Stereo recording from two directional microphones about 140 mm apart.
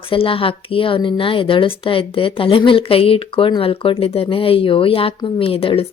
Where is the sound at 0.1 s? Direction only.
40° left (ahead or behind).